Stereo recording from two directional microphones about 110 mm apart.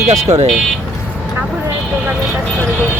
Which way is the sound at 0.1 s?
85° right.